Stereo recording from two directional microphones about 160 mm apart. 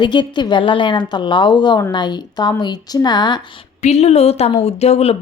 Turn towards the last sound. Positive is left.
turn(degrees=40)  # may be behind; listen again after turning